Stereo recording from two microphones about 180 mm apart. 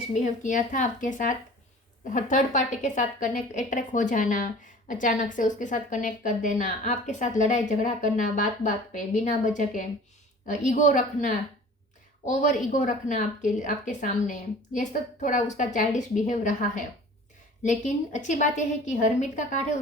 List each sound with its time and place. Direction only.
0.1 s a woman's voice: 45° left (ahead or behind)